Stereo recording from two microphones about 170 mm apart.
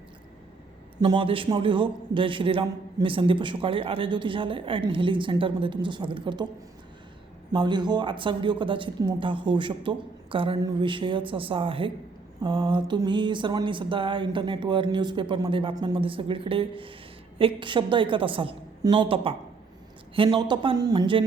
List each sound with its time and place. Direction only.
1.0 s a man's voice: 30° right (ahead or behind)
7.5 s a man's voice: 25° right (ahead or behind)